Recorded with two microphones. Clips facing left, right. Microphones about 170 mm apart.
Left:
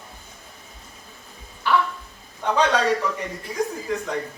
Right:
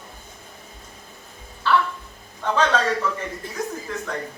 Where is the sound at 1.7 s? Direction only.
15° left (ahead or behind).